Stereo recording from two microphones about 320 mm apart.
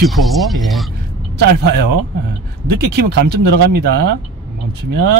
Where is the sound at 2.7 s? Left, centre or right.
Right.